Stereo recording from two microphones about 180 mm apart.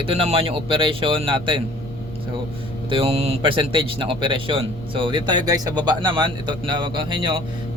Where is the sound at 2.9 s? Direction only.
30° right (ahead or behind).